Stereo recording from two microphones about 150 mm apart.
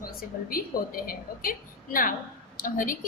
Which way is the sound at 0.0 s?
75° left (ahead or behind).